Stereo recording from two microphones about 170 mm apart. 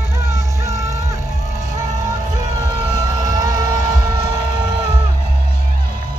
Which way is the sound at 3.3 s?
20° right (ahead or behind).